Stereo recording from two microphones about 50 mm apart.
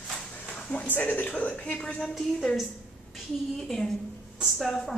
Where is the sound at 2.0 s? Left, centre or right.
Centre.